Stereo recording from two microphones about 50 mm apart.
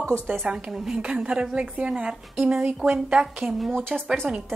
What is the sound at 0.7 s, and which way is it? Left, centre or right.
Speech, centre.